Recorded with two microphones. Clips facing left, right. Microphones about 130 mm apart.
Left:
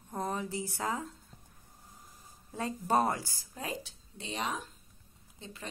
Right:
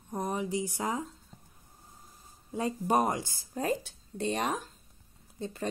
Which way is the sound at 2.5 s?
15° right (ahead or behind).